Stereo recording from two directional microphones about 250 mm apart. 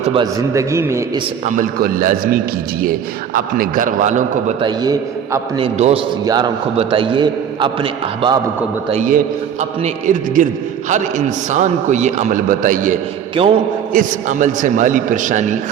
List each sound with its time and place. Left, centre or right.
0.1 s a man's voice: centre
1.5 s a man's voice: right
4.6 s a man's voice: centre
8.9 s a man's voice: right